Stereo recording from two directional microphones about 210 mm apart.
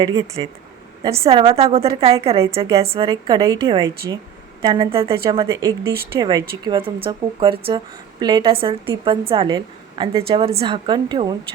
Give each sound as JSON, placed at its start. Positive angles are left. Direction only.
{"t": 0.0, "sound": "a woman's voice", "side_deg": -20}
{"t": 5.5, "sound": "a woman's voice", "side_deg": -15}